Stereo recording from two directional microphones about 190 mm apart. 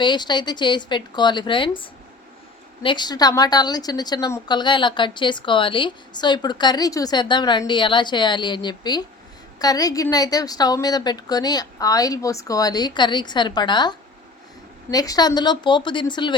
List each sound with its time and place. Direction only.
0.0 s a woman's voice: 25° left (ahead or behind)